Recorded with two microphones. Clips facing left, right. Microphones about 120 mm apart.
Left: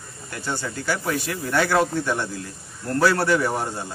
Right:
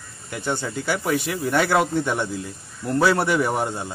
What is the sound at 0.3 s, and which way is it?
Speech, 20° right (ahead or behind).